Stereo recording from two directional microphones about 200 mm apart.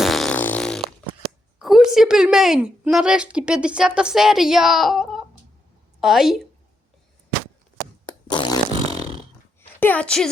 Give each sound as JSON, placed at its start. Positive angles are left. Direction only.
{"t": 0.0, "sound": "fart", "side_deg": 0}
{"t": 1.5, "sound": "a woman's voice", "side_deg": 0}
{"t": 8.0, "sound": "fart", "side_deg": 20}
{"t": 9.8, "sound": "a woman's voice", "side_deg": 5}